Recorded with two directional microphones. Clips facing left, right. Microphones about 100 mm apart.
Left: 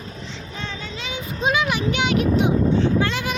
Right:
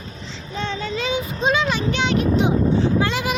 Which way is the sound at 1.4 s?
10° left (ahead or behind).